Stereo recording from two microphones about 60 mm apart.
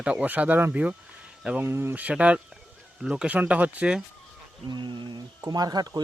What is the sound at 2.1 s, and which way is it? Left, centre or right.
A man's voice, right.